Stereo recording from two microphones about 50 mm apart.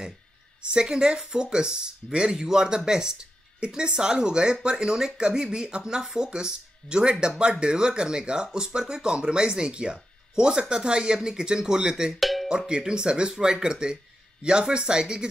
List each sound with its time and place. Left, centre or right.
0.6 s speech: centre
12.2 s cowbell: centre
12.4 s speech: centre